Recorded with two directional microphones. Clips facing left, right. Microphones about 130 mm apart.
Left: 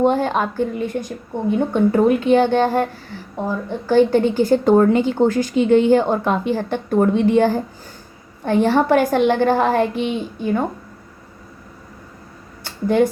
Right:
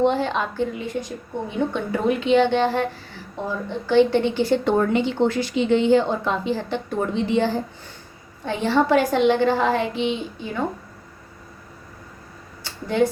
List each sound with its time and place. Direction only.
0.0 s a woman's voice: 45° left (ahead or behind)